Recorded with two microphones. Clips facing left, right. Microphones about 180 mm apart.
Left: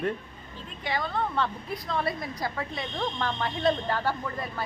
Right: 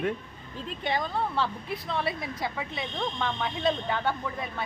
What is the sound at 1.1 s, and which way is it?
A woman's voice, 5° right (ahead or behind).